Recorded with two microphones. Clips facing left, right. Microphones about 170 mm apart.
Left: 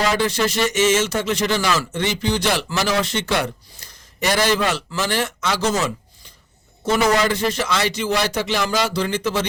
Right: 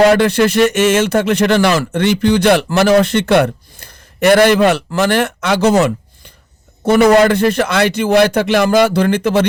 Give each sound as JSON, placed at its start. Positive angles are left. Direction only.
{"t": 0.0, "sound": "speech", "side_deg": -60}